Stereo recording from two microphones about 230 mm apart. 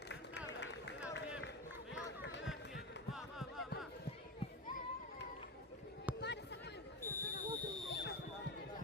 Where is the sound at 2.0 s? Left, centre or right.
Left.